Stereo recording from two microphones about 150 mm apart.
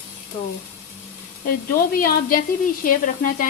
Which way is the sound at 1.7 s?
75° left (ahead or behind).